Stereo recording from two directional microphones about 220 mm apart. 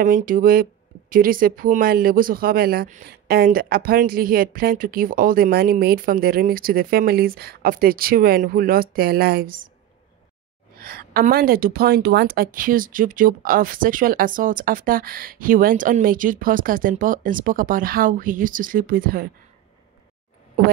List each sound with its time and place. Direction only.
0.0 s speech: 40° right (ahead or behind)
10.8 s speech: 45° right (ahead or behind)